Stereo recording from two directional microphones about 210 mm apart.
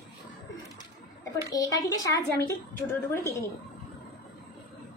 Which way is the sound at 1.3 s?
15° left (ahead or behind).